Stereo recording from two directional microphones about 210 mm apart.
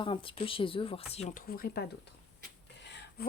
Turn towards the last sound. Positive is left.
turn(degrees=55)  # may be behind; listen again after turning